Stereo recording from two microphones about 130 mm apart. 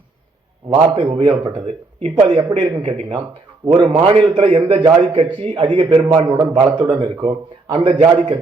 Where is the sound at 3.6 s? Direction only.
35° right (ahead or behind).